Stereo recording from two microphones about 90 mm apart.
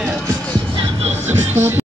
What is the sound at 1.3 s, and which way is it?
Speech, 25° right (ahead or behind).